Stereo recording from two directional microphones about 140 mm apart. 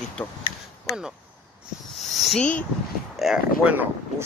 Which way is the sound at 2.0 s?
Centre (ahead or behind).